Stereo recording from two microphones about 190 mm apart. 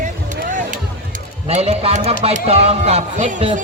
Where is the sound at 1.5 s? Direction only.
35° right (ahead or behind).